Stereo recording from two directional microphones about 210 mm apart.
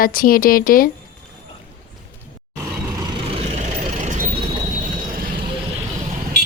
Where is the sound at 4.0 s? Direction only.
35° right (ahead or behind).